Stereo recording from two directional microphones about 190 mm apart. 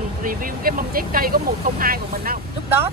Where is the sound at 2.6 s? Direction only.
10° right (ahead or behind).